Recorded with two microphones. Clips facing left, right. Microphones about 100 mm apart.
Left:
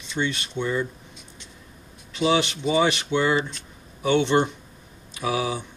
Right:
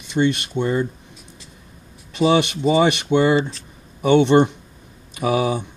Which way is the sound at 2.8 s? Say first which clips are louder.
Right 5 dB; 60° right (ahead or behind).